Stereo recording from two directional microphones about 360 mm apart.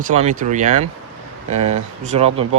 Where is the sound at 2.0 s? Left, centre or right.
Centre.